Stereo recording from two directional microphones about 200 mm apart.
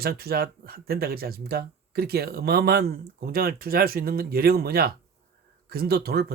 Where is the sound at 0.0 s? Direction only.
50° right (ahead or behind).